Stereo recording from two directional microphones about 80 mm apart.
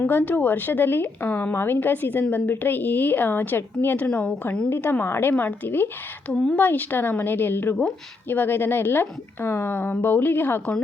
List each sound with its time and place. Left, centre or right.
0.0 s a woman's voice: left
4.7 s a woman's voice: left
6.3 s speech: centre
6.6 s a woman's voice: left